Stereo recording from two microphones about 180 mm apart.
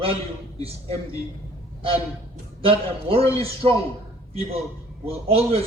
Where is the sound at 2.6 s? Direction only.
30° right (ahead or behind).